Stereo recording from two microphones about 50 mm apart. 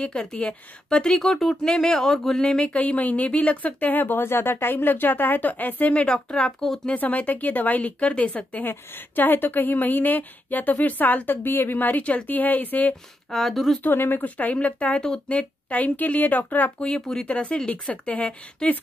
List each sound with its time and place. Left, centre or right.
0.0 s a woman's voice: left
5.9 s a woman's voice: centre
6.9 s speech: left
8.6 s speech: left
13.3 s speech: centre
13.8 s speech: left
14.3 s speech: left
16.8 s speech: centre